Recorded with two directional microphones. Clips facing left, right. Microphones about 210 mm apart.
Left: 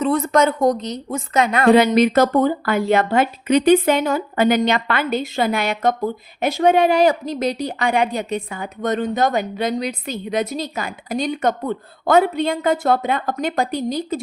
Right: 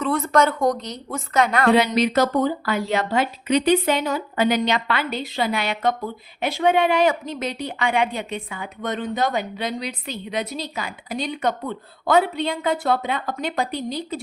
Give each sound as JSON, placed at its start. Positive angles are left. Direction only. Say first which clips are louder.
{"t": 0.0, "sound": "a woman's voice", "louder": "left 3 dB", "side_deg": 20}
{"t": 1.7, "sound": "speech", "louder": "left 8 dB", "side_deg": 50}